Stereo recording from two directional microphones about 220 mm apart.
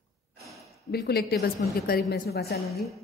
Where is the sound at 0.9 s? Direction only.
45° left (ahead or behind).